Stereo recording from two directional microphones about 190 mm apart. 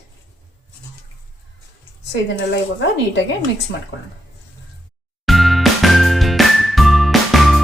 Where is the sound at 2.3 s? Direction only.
70° left (ahead or behind).